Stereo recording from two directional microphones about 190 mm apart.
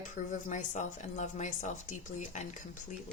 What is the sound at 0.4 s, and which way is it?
A woman's voice, 40° left (ahead or behind).